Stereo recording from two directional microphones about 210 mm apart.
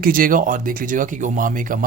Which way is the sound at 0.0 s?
40° right (ahead or behind).